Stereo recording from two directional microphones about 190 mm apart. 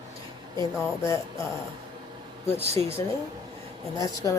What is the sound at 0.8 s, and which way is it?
Speech, 15° left (ahead or behind).